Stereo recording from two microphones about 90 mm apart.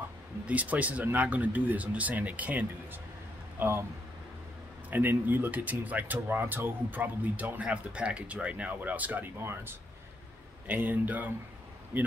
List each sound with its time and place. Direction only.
0.5 s speech: 15° right (ahead or behind)
3.5 s speech: 30° right (ahead or behind)
4.9 s speech: 20° right (ahead or behind)